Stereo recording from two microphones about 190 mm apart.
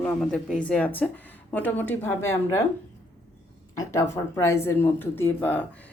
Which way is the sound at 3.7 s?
15° left (ahead or behind).